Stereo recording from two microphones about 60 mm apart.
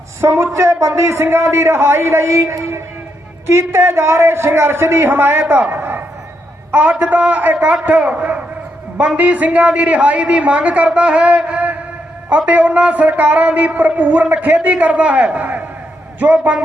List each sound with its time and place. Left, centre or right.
0.2 s a woman's voice: right
0.5 s a man's voice: right
5.5 s a sound: right
6.7 s a man's voice: right
10.8 s a sound: right
12.5 s a man's voice: right